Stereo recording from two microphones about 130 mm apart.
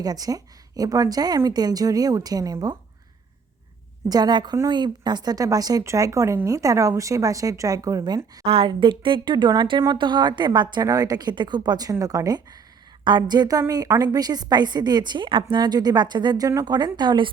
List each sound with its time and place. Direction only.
0.0 s speech: 30° right (ahead or behind)
4.1 s a woman's voice: 30° right (ahead or behind)
8.4 s a woman's voice: 45° right (ahead or behind)